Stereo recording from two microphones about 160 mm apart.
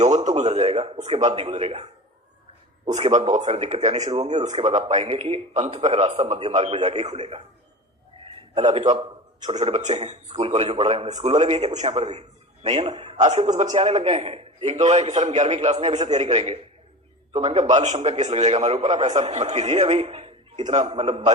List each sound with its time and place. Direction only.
0.3 s a man's voice: 45° right (ahead or behind)
8.2 s a sound: 40° right (ahead or behind)
9.6 s a man's voice: 45° right (ahead or behind)
13.1 s a man's voice: 45° right (ahead or behind)